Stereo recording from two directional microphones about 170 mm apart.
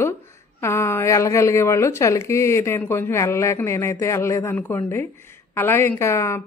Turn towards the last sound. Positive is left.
turn(degrees=15)  # may be behind; listen again after turning